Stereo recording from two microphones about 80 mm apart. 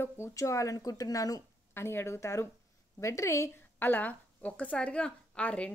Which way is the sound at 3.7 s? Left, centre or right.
Left.